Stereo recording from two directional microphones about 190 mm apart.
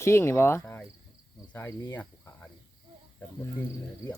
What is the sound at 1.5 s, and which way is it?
Cricket, 10° left (ahead or behind).